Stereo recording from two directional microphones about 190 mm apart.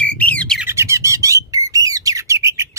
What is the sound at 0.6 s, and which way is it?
Bird, 15° right (ahead or behind).